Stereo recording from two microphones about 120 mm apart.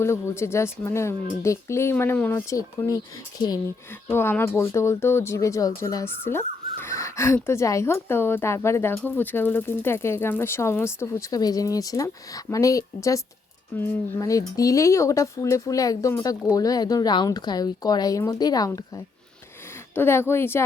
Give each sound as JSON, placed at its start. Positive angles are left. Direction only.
{"t": 0.0, "sound": "speech", "side_deg": 20}
{"t": 4.1, "sound": "speech", "side_deg": 20}
{"t": 19.9, "sound": "speech", "side_deg": 20}